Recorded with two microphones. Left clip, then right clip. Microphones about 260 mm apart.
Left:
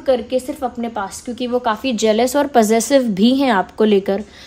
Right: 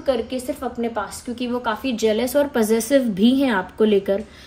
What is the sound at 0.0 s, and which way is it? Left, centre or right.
A woman's voice, left.